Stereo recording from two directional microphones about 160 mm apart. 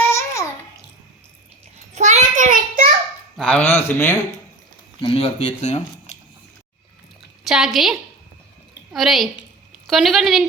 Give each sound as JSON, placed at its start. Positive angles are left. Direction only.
{"t": 0.0, "sound": "babbling", "side_deg": 15}
{"t": 2.0, "sound": "child singing", "side_deg": -45}
{"t": 3.3, "sound": "a man's voice", "side_deg": 5}
{"t": 5.0, "sound": "speech", "side_deg": 40}
{"t": 7.4, "sound": "a woman's voice", "side_deg": 0}